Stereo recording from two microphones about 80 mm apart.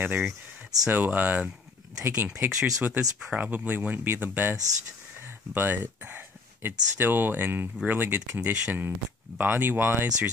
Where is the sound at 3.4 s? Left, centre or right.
Right.